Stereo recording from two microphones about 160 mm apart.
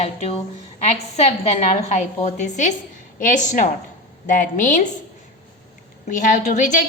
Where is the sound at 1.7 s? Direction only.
45° left (ahead or behind).